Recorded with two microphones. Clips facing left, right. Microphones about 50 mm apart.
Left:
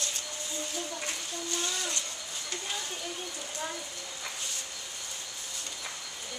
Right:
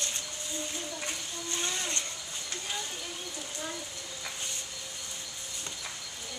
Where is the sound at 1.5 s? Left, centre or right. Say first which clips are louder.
Even; right.